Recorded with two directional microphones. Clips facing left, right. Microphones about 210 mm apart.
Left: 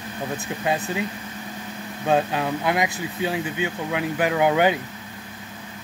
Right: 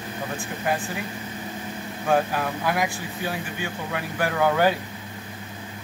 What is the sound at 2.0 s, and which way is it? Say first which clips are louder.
Speech: left 1 dB; 20° left (ahead or behind).